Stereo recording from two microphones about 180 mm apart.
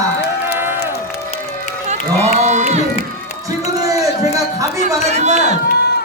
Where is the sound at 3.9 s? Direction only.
20° right (ahead or behind).